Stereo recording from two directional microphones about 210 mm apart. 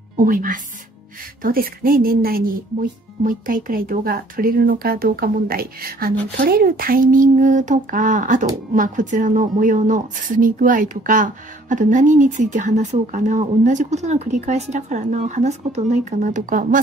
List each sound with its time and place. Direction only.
0.2 s a woman's voice: 40° right (ahead or behind)